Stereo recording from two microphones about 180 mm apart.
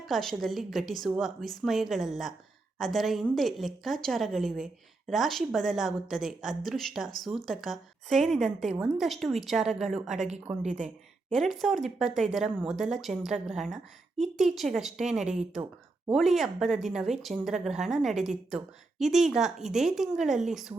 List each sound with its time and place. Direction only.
0.0 s a woman's voice: centre (ahead or behind)
10.2 s speech: 40° right (ahead or behind)
10.4 s a woman's voice: 5° right (ahead or behind)